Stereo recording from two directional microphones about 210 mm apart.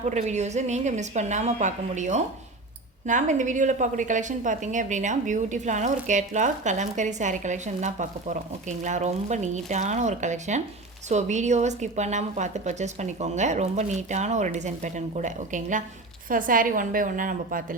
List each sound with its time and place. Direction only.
0.0 s a woman's voice: 35° right (ahead or behind)